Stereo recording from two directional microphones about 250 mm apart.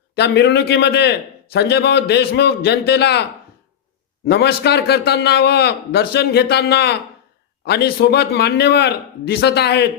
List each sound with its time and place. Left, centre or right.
0.2 s a man's voice: left
4.3 s a man's voice: left